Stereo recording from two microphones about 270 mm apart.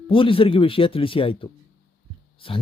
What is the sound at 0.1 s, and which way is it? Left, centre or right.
Speech, centre.